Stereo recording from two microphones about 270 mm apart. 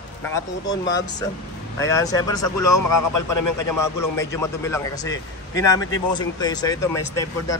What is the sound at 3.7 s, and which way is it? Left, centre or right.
Speech, centre.